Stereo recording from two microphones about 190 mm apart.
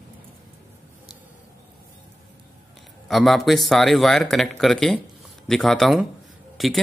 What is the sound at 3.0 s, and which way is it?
Speech, centre (ahead or behind).